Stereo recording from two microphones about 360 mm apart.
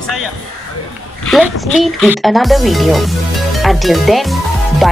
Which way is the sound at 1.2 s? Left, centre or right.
Centre.